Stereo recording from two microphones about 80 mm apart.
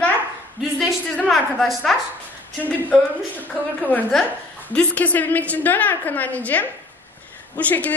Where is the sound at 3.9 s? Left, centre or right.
Left.